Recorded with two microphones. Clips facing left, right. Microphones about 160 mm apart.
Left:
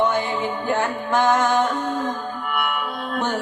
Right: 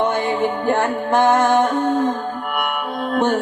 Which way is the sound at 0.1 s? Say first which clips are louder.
Right 4 dB; 50° right (ahead or behind).